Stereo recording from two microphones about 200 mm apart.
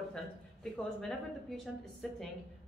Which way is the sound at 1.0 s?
Centre (ahead or behind).